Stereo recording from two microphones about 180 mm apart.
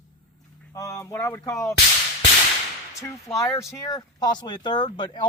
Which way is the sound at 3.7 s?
20° left (ahead or behind).